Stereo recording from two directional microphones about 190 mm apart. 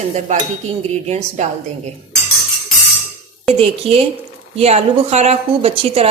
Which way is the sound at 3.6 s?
30° right (ahead or behind).